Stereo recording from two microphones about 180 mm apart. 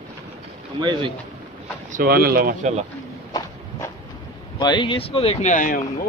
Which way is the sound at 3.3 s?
20° left (ahead or behind).